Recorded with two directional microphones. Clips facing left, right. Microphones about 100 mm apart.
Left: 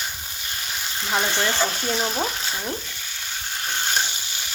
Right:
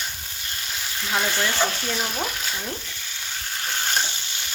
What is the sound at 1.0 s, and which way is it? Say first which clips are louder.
Speech: left 1 dB; 25° left (ahead or behind).